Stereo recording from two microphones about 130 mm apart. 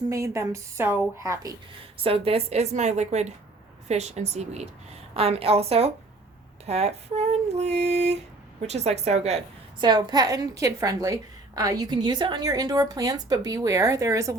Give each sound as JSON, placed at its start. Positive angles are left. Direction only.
{"t": 0.1, "sound": "a woman's voice", "side_deg": -25}
{"t": 2.0, "sound": "female singing", "side_deg": -45}
{"t": 5.1, "sound": "a woman's voice", "side_deg": -50}
{"t": 6.7, "sound": "female singing", "side_deg": -55}
{"t": 9.8, "sound": "a woman's voice", "side_deg": -35}